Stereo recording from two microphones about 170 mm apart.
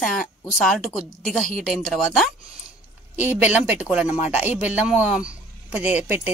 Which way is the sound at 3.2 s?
10° right (ahead or behind).